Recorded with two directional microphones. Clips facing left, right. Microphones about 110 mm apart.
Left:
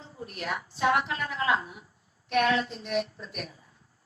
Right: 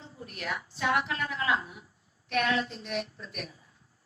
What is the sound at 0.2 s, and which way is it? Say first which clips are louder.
A woman's voice: left 2 dB; 30° left (ahead or behind).